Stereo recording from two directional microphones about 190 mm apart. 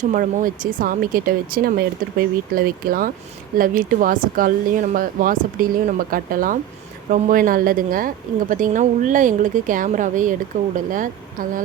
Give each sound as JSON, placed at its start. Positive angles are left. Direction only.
{"t": 0.0, "sound": "a woman's voice", "side_deg": -40}